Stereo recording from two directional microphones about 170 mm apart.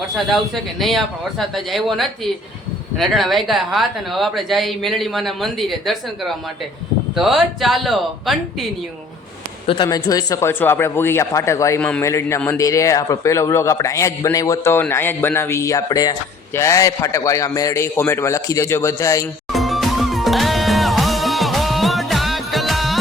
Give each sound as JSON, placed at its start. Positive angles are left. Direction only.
{"t": 0.3, "sound": "speech", "side_deg": 0}
{"t": 9.6, "sound": "a man's voice", "side_deg": 25}
{"t": 19.5, "sound": "music", "side_deg": 0}